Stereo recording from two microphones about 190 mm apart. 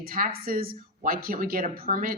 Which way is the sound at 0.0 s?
50° right (ahead or behind).